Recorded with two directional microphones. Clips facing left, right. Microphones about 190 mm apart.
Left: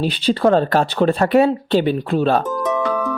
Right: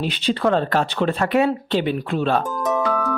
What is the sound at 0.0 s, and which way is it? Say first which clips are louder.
Speech: left 4 dB; 35° left (ahead or behind).